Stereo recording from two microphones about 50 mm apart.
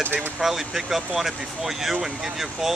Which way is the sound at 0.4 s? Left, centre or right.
Centre.